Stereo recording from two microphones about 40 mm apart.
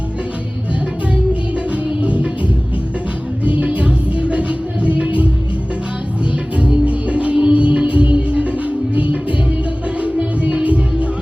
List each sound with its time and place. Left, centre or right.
2.0 s music: right
3.4 s music: right
6.8 s music: right
10.0 s music: right